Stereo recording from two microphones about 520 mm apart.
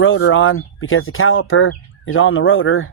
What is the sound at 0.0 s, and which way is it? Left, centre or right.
Speech, left.